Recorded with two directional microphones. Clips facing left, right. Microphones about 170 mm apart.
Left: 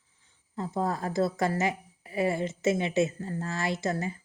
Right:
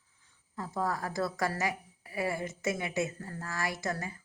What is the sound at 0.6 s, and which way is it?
A woman's voice, 25° left (ahead or behind).